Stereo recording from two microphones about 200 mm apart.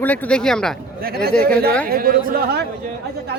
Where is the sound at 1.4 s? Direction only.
50° right (ahead or behind).